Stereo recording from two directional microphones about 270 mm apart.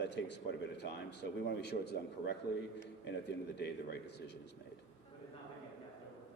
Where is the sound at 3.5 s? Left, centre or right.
Left.